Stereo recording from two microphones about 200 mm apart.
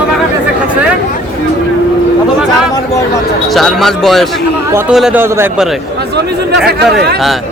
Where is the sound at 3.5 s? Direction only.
Centre (ahead or behind).